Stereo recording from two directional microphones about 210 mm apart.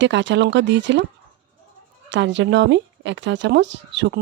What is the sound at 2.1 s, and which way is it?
Speech, 60° right (ahead or behind).